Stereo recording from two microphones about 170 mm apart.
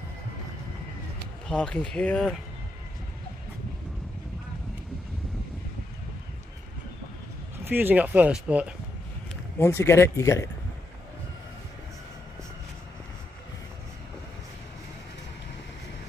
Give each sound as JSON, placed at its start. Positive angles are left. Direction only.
{"t": 1.5, "sound": "speech", "side_deg": 5}
{"t": 7.5, "sound": "speech", "side_deg": -10}
{"t": 9.6, "sound": "speech", "side_deg": 15}